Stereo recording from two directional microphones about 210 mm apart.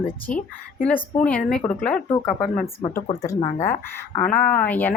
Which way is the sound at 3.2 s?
15° left (ahead or behind).